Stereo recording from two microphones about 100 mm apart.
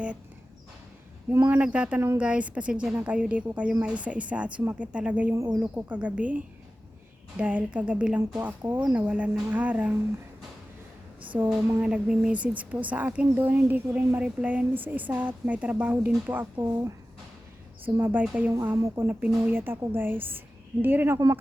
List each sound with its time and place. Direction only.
1.3 s a woman's voice: 20° right (ahead or behind)
5.3 s a woman's voice: 25° right (ahead or behind)
11.3 s a woman's voice: 5° right (ahead or behind)
18.0 s a woman's voice: 15° right (ahead or behind)